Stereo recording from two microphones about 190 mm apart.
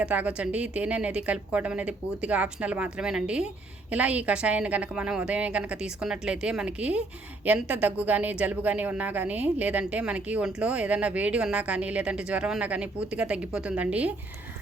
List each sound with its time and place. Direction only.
0.0 s speech: 5° right (ahead or behind)